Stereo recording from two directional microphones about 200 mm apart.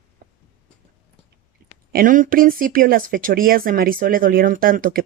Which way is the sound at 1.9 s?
45° right (ahead or behind).